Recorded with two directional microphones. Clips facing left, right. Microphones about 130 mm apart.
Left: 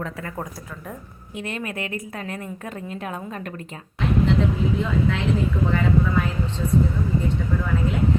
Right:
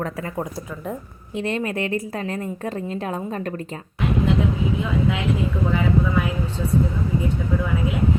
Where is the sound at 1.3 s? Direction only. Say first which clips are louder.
Right 6 dB; 30° right (ahead or behind).